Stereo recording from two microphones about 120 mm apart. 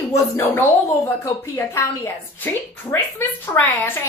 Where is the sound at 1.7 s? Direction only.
20° left (ahead or behind).